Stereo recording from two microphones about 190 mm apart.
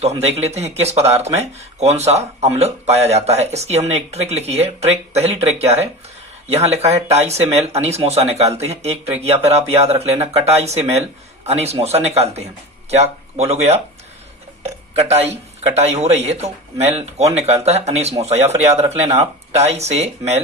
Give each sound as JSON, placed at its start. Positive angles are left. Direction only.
{"t": 0.0, "sound": "speech", "side_deg": -35}
{"t": 14.9, "sound": "speech", "side_deg": -35}